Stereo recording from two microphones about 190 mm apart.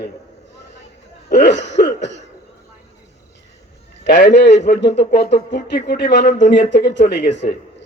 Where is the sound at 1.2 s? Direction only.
65° left (ahead or behind).